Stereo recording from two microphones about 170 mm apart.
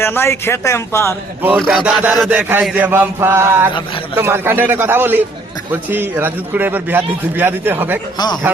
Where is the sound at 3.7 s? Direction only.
30° left (ahead or behind).